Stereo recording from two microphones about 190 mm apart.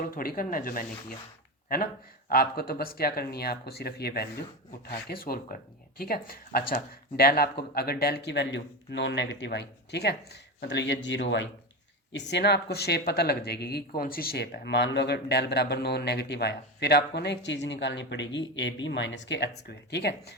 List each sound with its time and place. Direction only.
0.0 s speech: 50° left (ahead or behind)
2.3 s speech: 50° left (ahead or behind)